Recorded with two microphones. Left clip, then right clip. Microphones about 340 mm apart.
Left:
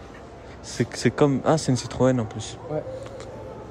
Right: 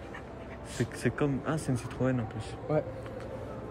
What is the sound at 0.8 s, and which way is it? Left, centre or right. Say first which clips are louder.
Speech: left 10 dB; centre.